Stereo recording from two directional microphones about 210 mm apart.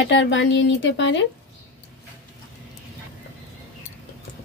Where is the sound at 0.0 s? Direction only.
60° left (ahead or behind).